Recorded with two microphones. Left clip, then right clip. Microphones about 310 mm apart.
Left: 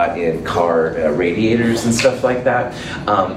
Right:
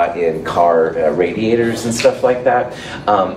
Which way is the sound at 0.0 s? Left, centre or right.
Right.